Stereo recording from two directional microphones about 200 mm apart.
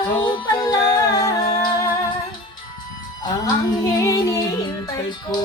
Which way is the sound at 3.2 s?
20° left (ahead or behind).